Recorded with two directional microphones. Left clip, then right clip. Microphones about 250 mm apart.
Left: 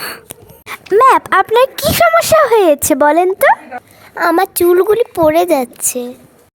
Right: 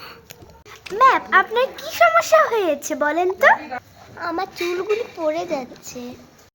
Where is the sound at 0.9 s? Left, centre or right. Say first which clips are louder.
Left 6 dB; left.